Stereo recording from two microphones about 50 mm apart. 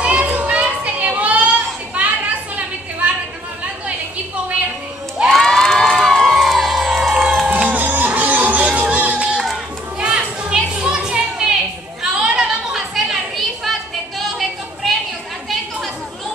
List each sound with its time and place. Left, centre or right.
0.0 s children playing: right
2.0 s a sound: right
5.4 s crowd: centre
7.4 s music: right
9.9 s children playing: centre
12.0 s chatter: centre
12.9 s a sound: centre